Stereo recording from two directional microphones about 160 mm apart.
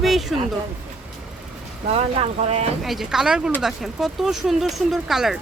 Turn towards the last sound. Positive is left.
turn(degrees=0)  # may be behind; listen again after turning